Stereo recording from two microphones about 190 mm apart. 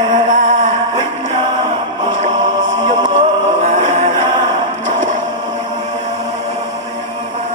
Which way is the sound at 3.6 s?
40° right (ahead or behind).